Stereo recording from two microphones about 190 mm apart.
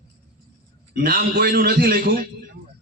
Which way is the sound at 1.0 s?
55° right (ahead or behind).